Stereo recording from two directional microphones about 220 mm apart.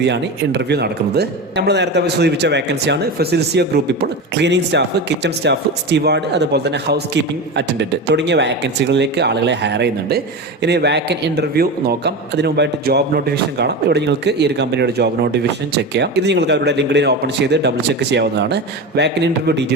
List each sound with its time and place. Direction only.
0.0 s speech: 50° right (ahead or behind)